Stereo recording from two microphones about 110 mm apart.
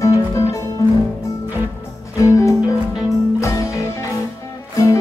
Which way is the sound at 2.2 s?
30° left (ahead or behind).